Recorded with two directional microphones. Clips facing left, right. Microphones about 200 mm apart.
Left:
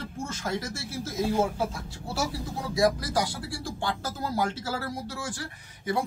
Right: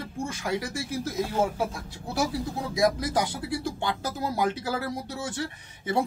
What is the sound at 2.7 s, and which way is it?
Speech, 20° right (ahead or behind).